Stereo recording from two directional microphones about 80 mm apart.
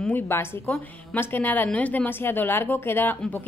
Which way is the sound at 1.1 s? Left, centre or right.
Left.